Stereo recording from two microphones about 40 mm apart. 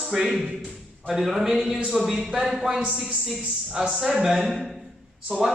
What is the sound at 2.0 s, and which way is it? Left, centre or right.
Speech, right.